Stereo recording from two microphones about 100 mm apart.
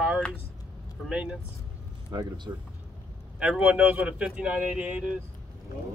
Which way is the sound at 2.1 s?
35° right (ahead or behind).